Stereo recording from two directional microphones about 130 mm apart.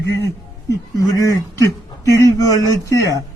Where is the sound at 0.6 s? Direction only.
25° left (ahead or behind).